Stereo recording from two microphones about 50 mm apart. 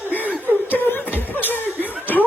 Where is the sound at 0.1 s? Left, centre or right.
Left.